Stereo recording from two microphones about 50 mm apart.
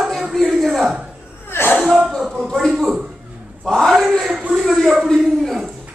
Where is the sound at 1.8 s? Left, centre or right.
Centre.